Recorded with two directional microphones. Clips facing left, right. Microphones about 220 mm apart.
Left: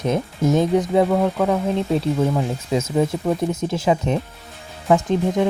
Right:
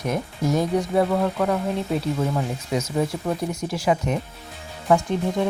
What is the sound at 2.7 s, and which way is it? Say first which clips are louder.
Speech: left 4 dB; 25° left (ahead or behind).